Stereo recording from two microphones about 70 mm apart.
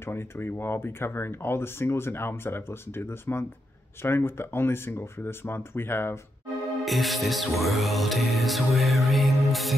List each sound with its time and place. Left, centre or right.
0.0 s speech: left
6.8 s music: centre